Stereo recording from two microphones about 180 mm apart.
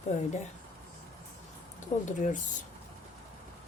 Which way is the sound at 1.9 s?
40° left (ahead or behind).